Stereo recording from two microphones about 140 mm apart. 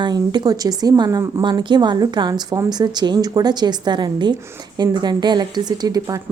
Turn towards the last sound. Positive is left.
turn(degrees=-30)  # may be behind; listen again after turning